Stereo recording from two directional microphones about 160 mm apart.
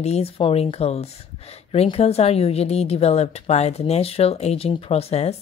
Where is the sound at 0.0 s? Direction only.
40° left (ahead or behind).